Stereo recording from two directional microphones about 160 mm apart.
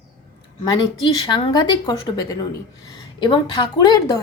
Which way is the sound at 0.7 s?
25° left (ahead or behind).